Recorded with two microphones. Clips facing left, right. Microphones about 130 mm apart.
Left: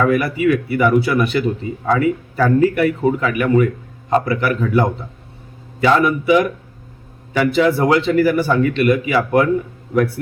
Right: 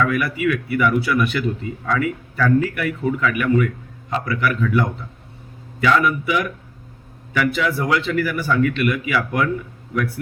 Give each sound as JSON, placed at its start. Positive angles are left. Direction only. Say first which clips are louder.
{"t": 0.0, "sound": "speech", "louder": "left 4 dB", "side_deg": 35}